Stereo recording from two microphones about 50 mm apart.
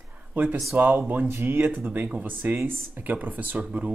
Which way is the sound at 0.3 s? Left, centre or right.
Right.